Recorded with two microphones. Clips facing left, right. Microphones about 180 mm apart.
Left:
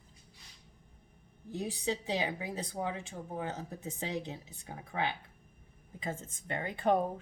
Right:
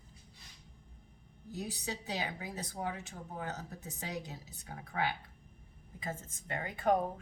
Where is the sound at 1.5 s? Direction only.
30° left (ahead or behind).